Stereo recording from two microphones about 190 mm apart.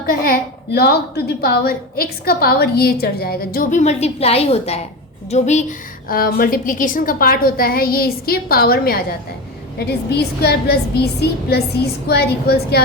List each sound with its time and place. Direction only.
0.0 s a woman's voice: 50° left (ahead or behind)